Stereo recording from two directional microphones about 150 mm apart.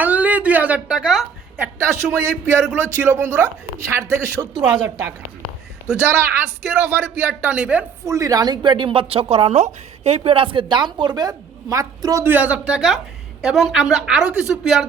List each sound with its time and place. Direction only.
0.0 s a sound: 10° right (ahead or behind)
1.5 s a woman's voice: 10° right (ahead or behind)
5.9 s speech: 15° right (ahead or behind)
8.0 s a woman's voice: 20° right (ahead or behind); by 14.8 s 5° right (ahead or behind)